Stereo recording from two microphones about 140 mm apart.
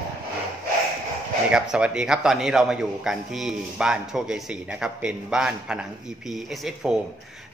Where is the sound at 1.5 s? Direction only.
5° right (ahead or behind).